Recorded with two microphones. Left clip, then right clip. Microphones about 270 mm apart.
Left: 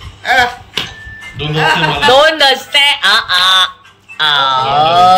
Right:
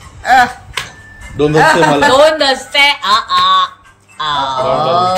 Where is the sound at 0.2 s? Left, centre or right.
Right.